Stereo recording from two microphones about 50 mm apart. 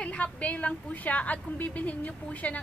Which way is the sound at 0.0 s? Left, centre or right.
Left.